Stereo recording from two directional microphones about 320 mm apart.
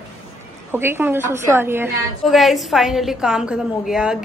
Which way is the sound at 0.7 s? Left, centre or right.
Centre.